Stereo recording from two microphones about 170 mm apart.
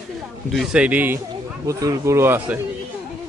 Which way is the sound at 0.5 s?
Centre (ahead or behind).